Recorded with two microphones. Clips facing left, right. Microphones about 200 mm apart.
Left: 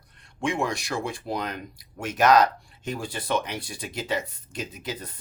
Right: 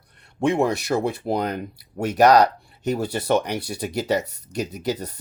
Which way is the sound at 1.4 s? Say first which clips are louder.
Right 7 dB; 35° right (ahead or behind).